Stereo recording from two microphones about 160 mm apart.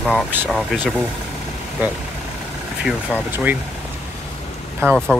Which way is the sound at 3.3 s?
10° right (ahead or behind).